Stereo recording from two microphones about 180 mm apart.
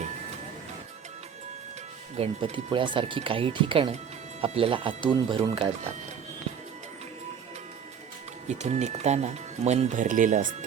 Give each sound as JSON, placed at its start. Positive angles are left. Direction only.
{"t": 2.1, "sound": "speech", "side_deg": -30}
{"t": 8.4, "sound": "speech", "side_deg": -40}